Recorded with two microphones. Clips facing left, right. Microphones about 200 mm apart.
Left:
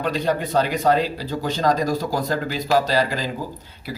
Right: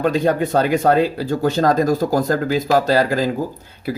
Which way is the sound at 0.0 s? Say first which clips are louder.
Right 5 dB; 50° right (ahead or behind).